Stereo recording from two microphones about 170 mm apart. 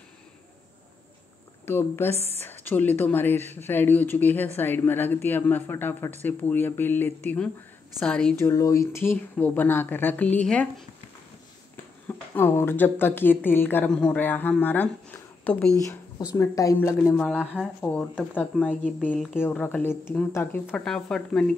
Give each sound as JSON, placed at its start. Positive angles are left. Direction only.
{"t": 1.7, "sound": "speech", "side_deg": 15}
{"t": 8.4, "sound": "speech", "side_deg": 15}
{"t": 12.1, "sound": "speech", "side_deg": 15}
{"t": 17.2, "sound": "speech", "side_deg": 0}